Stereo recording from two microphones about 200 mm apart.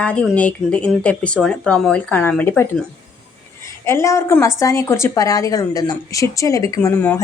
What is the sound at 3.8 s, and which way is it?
Speech, 15° left (ahead or behind).